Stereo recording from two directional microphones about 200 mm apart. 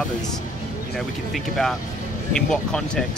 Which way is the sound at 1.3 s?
Centre (ahead or behind).